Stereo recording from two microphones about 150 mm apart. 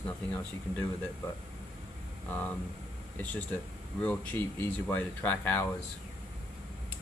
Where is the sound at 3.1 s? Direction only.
10° left (ahead or behind).